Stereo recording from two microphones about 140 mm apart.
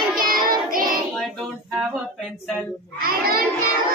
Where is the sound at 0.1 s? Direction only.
90° right.